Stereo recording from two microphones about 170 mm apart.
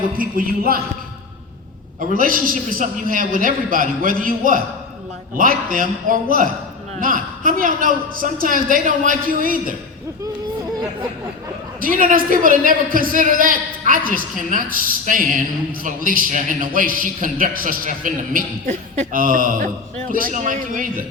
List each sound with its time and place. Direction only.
0.2 s speech: 55° right (ahead or behind)
2.0 s a man's voice: 55° right (ahead or behind)
11.8 s a man's voice: 55° right (ahead or behind)